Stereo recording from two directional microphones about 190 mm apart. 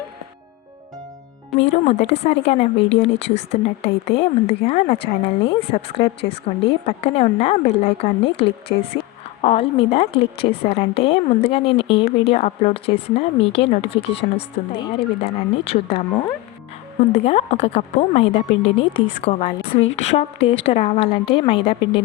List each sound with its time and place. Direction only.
1.7 s a woman's voice: 35° left (ahead or behind)